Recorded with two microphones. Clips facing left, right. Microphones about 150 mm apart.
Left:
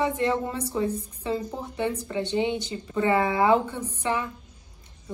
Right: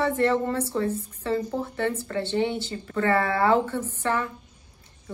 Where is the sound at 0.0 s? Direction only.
15° left (ahead or behind).